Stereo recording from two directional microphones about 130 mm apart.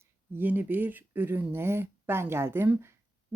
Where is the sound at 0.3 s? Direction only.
15° right (ahead or behind).